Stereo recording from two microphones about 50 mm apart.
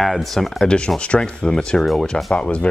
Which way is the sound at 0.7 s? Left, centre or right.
Centre.